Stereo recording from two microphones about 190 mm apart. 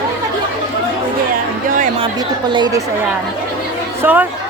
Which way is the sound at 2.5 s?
20° right (ahead or behind).